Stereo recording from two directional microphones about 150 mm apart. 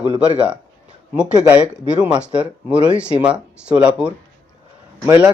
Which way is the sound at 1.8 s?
10° right (ahead or behind).